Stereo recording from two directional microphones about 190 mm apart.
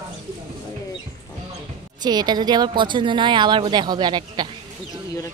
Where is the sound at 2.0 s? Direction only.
20° right (ahead or behind).